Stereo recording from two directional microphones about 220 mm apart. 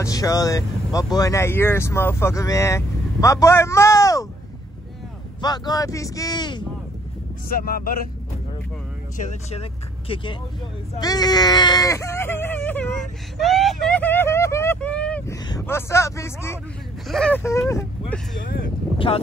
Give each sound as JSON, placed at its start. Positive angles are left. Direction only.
{"t": 0.0, "sound": "speech", "side_deg": 15}
{"t": 5.4, "sound": "speech", "side_deg": 20}
{"t": 7.4, "sound": "speech", "side_deg": 40}
{"t": 9.1, "sound": "speech", "side_deg": 30}
{"t": 11.0, "sound": "sheep", "side_deg": 15}
{"t": 15.4, "sound": "speech", "side_deg": 15}
{"t": 18.9, "sound": "speech", "side_deg": 25}